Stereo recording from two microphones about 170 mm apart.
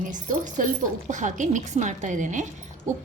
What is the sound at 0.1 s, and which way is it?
A woman's voice, 50° right (ahead or behind).